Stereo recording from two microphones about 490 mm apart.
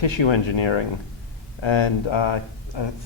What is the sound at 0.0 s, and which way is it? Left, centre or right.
Speech, left.